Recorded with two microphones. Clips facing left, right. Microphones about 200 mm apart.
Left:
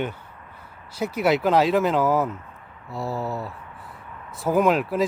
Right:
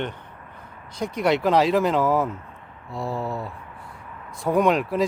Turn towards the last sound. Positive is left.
turn(degrees=0)  # may be behind; listen again after turning